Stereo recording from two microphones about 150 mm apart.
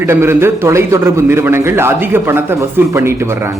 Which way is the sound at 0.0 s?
15° right (ahead or behind).